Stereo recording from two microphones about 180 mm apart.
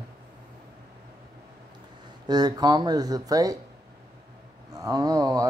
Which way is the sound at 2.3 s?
25° right (ahead or behind).